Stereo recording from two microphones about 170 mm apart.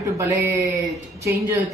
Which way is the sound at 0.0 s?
20° right (ahead or behind).